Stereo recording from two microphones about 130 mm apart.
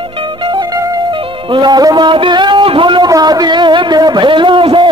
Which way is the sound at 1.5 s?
35° right (ahead or behind).